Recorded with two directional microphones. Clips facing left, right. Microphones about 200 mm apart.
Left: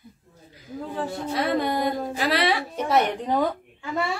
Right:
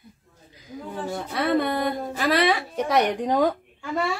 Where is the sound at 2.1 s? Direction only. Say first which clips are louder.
Right 5 dB; 50° right (ahead or behind).